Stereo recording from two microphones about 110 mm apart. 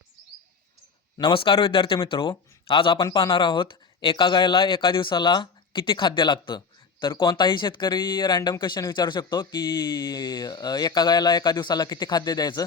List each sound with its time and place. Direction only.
1.2 s speech: 50° left (ahead or behind); by 12.6 s 35° left (ahead or behind)